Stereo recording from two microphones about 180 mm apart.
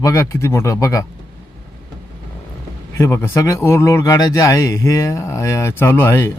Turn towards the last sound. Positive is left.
turn(degrees=15)  # may be behind; listen again after turning